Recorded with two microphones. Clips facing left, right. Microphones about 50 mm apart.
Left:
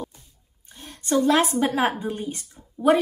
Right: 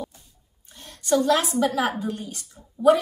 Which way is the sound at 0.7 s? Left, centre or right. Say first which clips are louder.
Right 1 dB; left.